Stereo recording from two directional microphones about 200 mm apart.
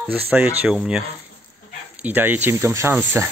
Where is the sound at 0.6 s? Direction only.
5° right (ahead or behind).